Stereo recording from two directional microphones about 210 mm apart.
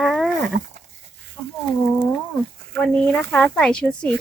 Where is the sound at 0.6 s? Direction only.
35° right (ahead or behind).